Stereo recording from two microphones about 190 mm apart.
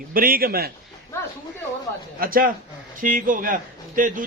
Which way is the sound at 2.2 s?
50° right (ahead or behind).